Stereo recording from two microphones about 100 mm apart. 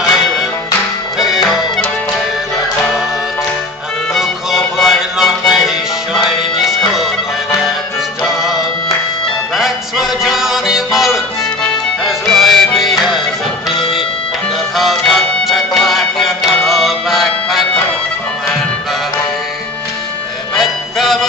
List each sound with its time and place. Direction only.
1.1 s music: centre (ahead or behind)
4.1 s music: 5° right (ahead or behind)
8.2 s music: centre (ahead or behind)
9.6 s music: centre (ahead or behind)
20.5 s music: centre (ahead or behind)